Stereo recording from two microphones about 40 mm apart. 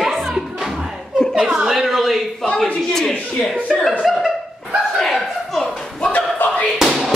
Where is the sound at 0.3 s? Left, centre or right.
Centre.